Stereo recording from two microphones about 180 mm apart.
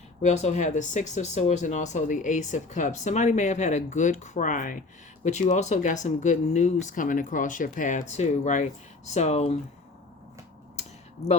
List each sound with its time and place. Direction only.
0.2 s speech: 40° left (ahead or behind)
11.2 s speech: 35° left (ahead or behind)